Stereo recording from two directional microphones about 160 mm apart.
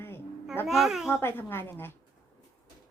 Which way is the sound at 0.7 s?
Centre (ahead or behind).